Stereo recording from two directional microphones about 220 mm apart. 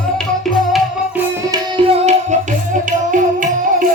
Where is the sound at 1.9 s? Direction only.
30° right (ahead or behind).